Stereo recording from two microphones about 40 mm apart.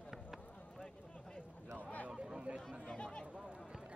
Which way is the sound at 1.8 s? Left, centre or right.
Left.